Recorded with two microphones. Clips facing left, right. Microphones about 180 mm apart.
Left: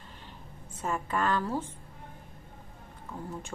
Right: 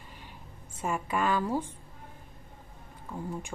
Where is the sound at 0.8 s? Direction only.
10° right (ahead or behind).